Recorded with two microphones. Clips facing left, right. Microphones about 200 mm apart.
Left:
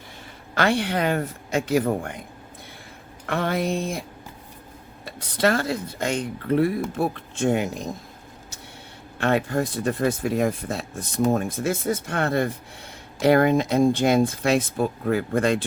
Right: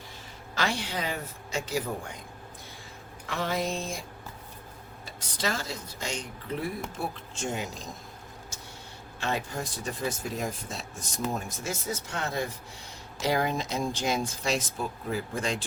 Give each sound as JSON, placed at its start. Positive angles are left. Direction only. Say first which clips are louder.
{"t": 0.5, "sound": "speech", "louder": "left 9 dB", "side_deg": 60}
{"t": 3.2, "sound": "speech", "louder": "left 6 dB", "side_deg": 55}
{"t": 5.0, "sound": "speech", "louder": "left 10 dB", "side_deg": 60}
{"t": 9.1, "sound": "speech", "louder": "left 10 dB", "side_deg": 60}